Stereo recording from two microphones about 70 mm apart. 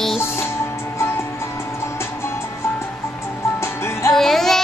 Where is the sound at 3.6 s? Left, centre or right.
Left.